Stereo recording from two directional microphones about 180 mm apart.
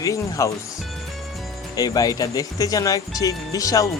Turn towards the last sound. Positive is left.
turn(degrees=20)  # may be behind; listen again after turning